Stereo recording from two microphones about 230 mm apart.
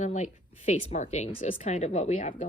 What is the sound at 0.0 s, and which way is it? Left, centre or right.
Speech, left.